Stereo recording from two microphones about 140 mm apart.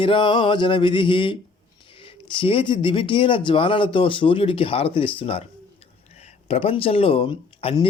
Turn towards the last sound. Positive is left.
turn(degrees=40)  # may be behind; listen again after turning